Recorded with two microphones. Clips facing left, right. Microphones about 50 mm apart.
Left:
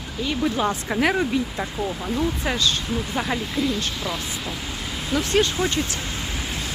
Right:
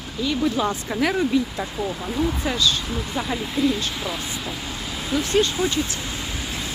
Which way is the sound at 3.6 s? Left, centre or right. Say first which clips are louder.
Right 6 dB; centre.